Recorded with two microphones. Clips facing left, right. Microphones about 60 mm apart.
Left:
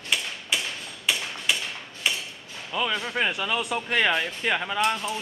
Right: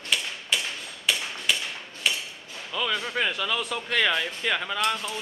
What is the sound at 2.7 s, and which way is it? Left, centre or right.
Speech, centre.